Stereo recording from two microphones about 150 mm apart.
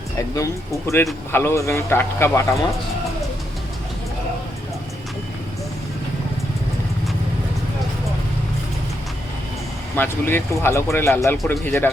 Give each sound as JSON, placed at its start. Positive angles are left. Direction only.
{"t": 0.2, "sound": "speech", "side_deg": 20}
{"t": 9.9, "sound": "speech", "side_deg": 15}